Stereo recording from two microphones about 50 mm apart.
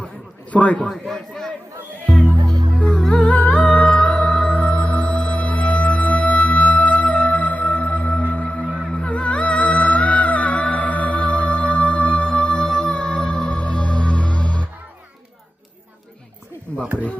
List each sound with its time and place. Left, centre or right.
0.5 s a man's voice: left
0.8 s a man's voice: centre
3.1 s humming: centre
3.3 s music: left
3.9 s music: centre
8.6 s music: centre
8.9 s music: left
16.8 s a sound: right